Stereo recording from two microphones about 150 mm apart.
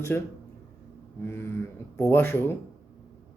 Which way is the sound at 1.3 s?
15° left (ahead or behind).